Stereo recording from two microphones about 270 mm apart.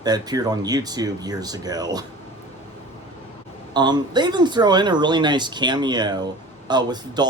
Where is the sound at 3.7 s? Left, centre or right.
Centre.